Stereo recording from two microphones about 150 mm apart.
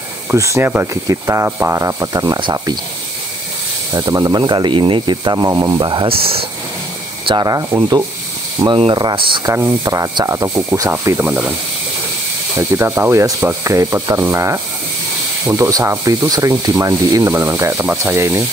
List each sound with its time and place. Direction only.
0.3 s rub: 20° right (ahead or behind)
3.9 s rub: 25° right (ahead or behind)
7.2 s rub: 25° right (ahead or behind)
8.5 s speech: 35° right (ahead or behind)
9.5 s rub: 20° right (ahead or behind)
12.5 s rub: 15° right (ahead or behind)